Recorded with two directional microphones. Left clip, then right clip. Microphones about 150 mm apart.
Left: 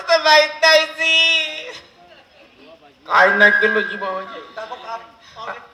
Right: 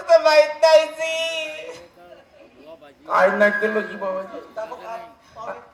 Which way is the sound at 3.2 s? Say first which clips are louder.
Left 5 dB; 45° right (ahead or behind).